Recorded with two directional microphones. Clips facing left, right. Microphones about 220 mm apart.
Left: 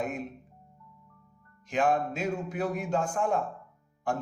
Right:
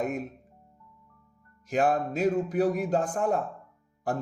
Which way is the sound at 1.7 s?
40° right (ahead or behind).